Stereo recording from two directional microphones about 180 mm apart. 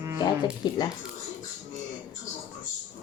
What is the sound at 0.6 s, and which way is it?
Speech, 25° left (ahead or behind).